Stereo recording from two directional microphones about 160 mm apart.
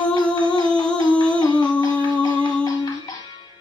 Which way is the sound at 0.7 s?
5° left (ahead or behind).